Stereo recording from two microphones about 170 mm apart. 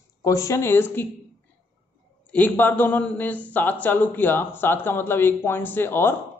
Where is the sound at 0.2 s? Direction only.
20° left (ahead or behind).